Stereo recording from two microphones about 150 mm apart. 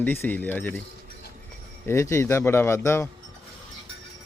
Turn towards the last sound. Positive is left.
turn(degrees=20)  # may be behind; listen again after turning